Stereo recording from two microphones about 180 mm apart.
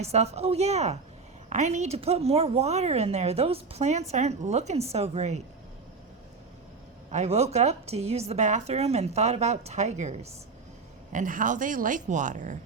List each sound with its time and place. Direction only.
0.0 s speech: 35° right (ahead or behind)
7.1 s speech: 40° right (ahead or behind)